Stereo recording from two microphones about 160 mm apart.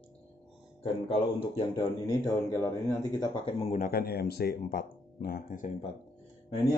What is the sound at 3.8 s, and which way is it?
Speech, 70° left (ahead or behind).